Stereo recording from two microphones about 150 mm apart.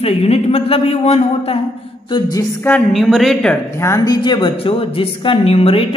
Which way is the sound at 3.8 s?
25° left (ahead or behind).